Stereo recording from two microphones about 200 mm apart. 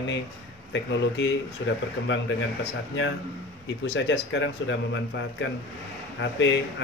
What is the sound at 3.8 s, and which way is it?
Speech, 65° left (ahead or behind).